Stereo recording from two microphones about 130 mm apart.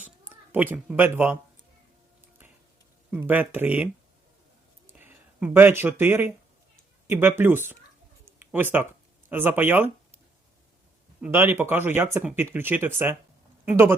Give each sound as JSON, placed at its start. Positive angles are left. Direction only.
{"t": 0.5, "sound": "speech", "side_deg": -15}
{"t": 3.1, "sound": "speech", "side_deg": -15}
{"t": 4.9, "sound": "speech", "side_deg": -15}
{"t": 8.2, "sound": "a sound", "side_deg": -15}
{"t": 9.3, "sound": "speech", "side_deg": -15}
{"t": 11.2, "sound": "speech", "side_deg": -15}